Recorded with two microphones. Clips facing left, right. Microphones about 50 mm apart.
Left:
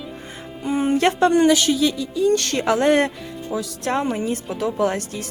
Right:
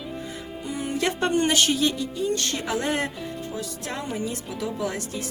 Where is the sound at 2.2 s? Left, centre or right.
Left.